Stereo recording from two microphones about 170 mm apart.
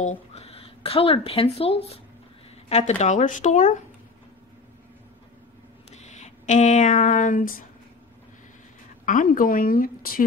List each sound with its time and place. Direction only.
0.0 s speech: 40° left (ahead or behind)
5.9 s speech: 40° left (ahead or behind)
9.0 s a woman's voice: 50° left (ahead or behind)